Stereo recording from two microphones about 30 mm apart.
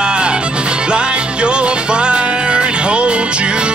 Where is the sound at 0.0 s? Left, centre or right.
Right.